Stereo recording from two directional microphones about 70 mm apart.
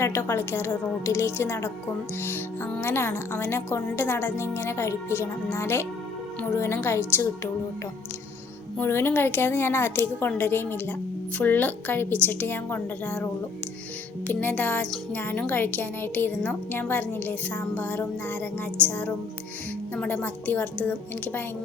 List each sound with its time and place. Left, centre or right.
0.0 s a woman's voice: left
2.8 s a woman's voice: left
8.8 s a woman's voice: left
14.3 s speech: left
20.1 s speech: left